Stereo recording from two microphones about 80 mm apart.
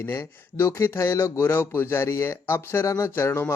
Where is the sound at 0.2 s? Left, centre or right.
Left.